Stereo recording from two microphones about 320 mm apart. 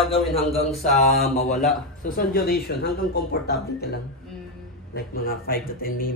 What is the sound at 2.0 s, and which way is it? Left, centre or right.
Speech, left.